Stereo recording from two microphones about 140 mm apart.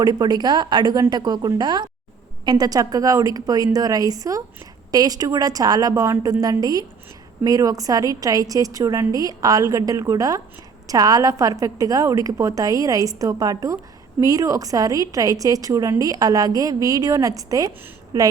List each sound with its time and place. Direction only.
0.0 s a woman's voice: 30° right (ahead or behind)